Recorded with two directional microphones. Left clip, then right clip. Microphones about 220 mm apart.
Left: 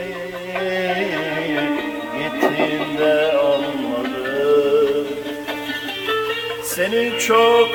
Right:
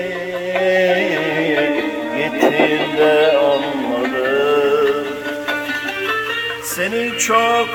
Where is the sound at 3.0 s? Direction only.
50° right (ahead or behind).